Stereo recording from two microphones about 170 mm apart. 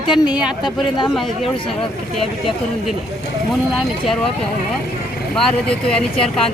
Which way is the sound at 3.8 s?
Centre (ahead or behind).